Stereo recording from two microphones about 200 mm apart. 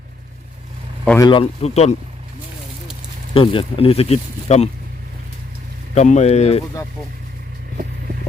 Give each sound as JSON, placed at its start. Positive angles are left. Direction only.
{"t": 1.2, "sound": "speech", "side_deg": 25}
{"t": 3.3, "sound": "speech", "side_deg": 25}
{"t": 5.9, "sound": "speech", "side_deg": 35}